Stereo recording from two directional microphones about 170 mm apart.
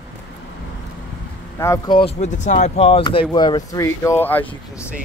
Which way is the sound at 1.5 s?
15° left (ahead or behind).